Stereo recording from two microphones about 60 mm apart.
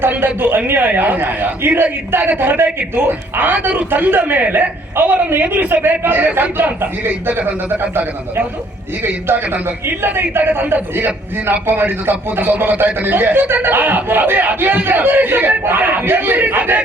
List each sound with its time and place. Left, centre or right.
0.0 s a man's voice: right